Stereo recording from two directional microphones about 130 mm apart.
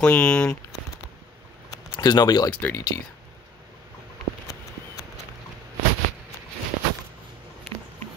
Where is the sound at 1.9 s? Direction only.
30° left (ahead or behind).